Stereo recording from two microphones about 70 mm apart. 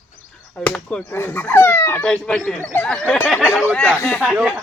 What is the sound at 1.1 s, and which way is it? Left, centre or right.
Speech, left.